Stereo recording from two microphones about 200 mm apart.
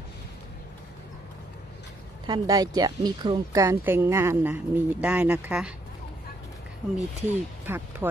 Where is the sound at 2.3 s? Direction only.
20° right (ahead or behind).